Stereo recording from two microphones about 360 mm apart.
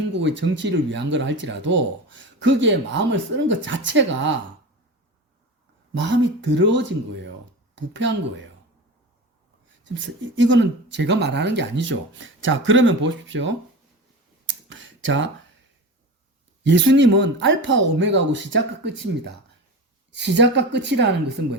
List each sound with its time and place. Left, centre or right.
0.1 s speech: right
6.1 s speech: right
10.3 s speech: right
14.4 s a sound: right
15.0 s speech: right
16.6 s speech: right